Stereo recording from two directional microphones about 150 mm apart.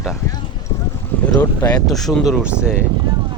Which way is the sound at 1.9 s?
Centre (ahead or behind).